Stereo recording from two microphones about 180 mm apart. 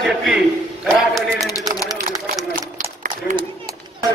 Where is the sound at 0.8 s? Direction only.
Centre (ahead or behind).